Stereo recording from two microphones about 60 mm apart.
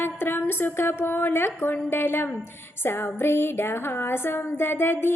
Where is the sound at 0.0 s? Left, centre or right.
Left.